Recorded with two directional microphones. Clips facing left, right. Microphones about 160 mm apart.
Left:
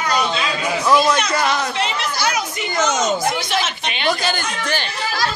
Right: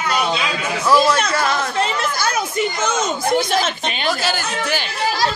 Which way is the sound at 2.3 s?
50° right (ahead or behind).